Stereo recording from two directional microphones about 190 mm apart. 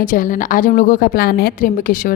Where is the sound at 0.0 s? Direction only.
45° left (ahead or behind).